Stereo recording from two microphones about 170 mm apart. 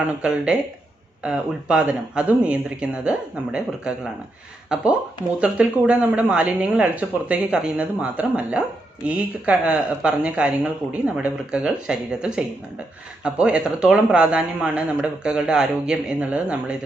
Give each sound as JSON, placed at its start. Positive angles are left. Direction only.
{"t": 0.2, "sound": "speech", "side_deg": -5}
{"t": 5.4, "sound": "speech", "side_deg": -5}